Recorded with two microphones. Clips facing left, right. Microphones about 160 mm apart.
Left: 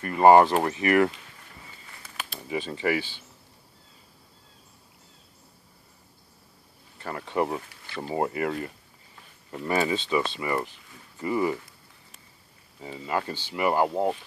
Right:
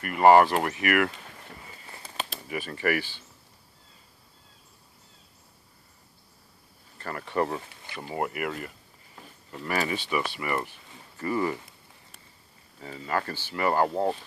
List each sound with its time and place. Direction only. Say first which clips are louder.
0.0 s speech: left 1 dB; 25° left (ahead or behind)
1.9 s a sound: right 4 dB; 30° right (ahead or behind)
2.4 s speech: left 2 dB; 25° left (ahead or behind)
7.0 s speech: left 1 dB; 10° left (ahead or behind)
8.0 s speech: left 4 dB; 25° left (ahead or behind)
12.8 s speech: left 1 dB; 15° left (ahead or behind)